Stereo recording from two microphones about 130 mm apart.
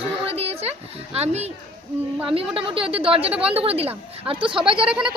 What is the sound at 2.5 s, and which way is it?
A woman's voice, 45° right (ahead or behind).